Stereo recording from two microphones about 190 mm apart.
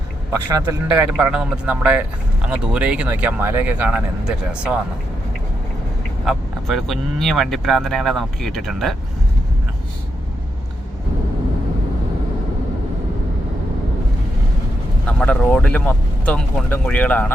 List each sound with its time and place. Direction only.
0.4 s speech: 15° right (ahead or behind)
6.2 s speech: centre (ahead or behind)
15.0 s speech: 5° left (ahead or behind)